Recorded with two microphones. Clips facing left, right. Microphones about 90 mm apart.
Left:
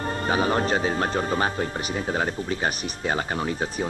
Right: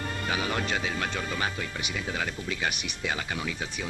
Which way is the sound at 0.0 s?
35° left (ahead or behind).